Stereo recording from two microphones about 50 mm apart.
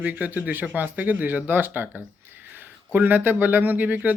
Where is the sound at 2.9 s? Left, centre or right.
Right.